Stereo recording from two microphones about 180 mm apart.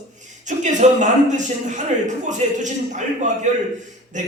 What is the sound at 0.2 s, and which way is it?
A man's voice, 40° right (ahead or behind).